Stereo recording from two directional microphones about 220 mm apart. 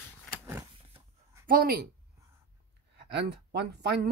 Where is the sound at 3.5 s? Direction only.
45° right (ahead or behind).